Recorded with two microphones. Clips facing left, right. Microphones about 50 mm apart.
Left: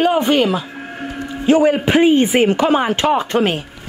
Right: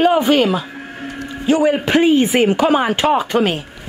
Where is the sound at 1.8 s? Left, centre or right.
Left.